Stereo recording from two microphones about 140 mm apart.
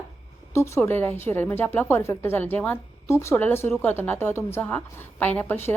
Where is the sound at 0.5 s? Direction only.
20° left (ahead or behind).